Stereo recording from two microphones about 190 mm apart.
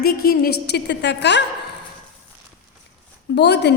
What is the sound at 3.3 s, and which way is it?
Speech, 60° left (ahead or behind).